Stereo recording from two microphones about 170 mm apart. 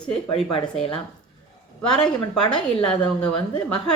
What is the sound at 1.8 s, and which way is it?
Speech, 5° left (ahead or behind).